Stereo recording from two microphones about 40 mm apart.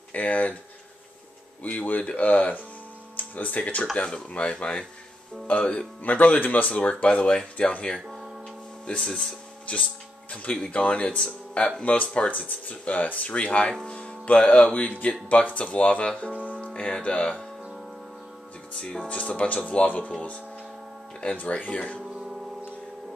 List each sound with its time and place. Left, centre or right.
0.1 s speech: left
1.6 s speech: left
3.9 s speech: left
9.0 s speech: centre
9.7 s speech: left
13.8 s music: left
14.7 s speech: left
18.7 s speech: left
21.4 s speech: left